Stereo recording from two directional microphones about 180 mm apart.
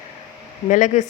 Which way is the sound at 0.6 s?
45° left (ahead or behind).